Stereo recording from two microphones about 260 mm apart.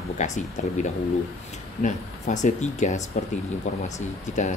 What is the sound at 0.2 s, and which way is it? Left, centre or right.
Speech, left.